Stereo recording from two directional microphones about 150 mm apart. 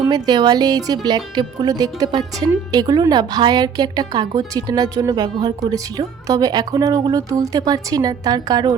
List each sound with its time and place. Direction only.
0.0 s speech: 30° right (ahead or behind)